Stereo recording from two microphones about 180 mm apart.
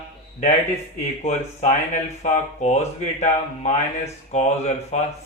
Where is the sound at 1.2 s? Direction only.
40° left (ahead or behind).